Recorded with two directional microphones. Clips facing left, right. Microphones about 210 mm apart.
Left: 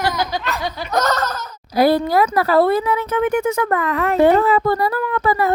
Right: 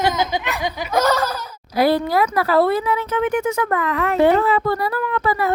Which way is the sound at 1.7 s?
40° left (ahead or behind).